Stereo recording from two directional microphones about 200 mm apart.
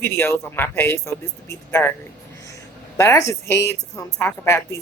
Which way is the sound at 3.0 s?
15° left (ahead or behind).